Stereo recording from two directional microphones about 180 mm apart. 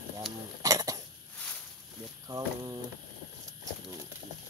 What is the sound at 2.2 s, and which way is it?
Speech, 20° right (ahead or behind).